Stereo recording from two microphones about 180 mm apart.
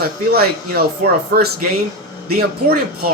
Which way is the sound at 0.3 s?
55° right (ahead or behind).